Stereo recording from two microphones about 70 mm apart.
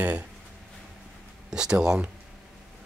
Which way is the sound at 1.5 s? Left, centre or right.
Centre.